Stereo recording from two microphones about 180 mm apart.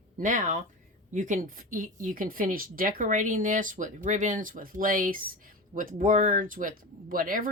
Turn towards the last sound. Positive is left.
turn(degrees=-50)  # may be behind; listen again after turning